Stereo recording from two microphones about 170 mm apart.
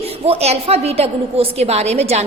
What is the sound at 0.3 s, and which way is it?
A woman's voice, 40° right (ahead or behind).